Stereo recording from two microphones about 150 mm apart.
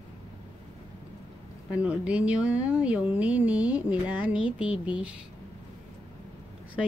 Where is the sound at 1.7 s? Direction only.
10° right (ahead or behind).